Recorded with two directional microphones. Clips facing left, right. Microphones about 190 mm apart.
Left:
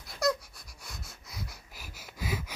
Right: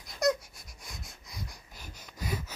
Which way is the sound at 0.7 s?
Centre (ahead or behind).